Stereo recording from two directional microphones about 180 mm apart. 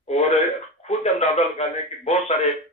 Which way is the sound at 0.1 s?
35° left (ahead or behind).